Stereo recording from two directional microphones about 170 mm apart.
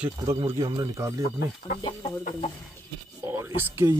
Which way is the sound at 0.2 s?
20° right (ahead or behind).